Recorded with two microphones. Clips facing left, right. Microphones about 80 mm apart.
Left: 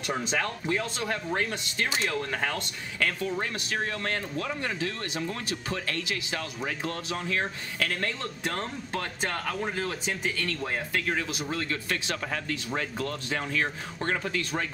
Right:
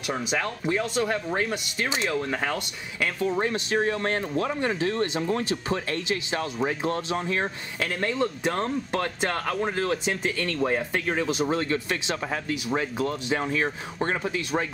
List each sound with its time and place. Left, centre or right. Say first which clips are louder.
0.1 s speech: right 2 dB; centre
11.1 s speech: right 6 dB; right